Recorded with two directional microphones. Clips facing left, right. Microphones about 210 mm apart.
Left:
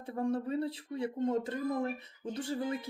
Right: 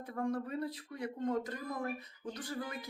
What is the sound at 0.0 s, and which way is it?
Speech, 30° left (ahead or behind).